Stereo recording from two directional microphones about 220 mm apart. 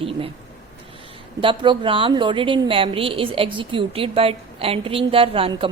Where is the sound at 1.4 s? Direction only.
20° right (ahead or behind).